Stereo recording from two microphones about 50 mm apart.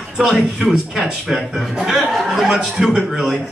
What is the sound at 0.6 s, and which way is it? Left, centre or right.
A man's voice, centre.